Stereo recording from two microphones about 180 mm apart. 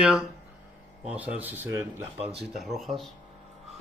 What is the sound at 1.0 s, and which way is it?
Speech, 10° right (ahead or behind).